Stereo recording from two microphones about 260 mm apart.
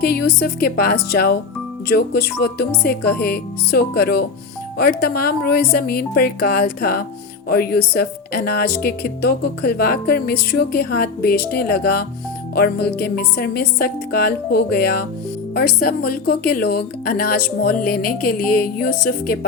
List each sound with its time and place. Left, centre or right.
0.0 s speech: left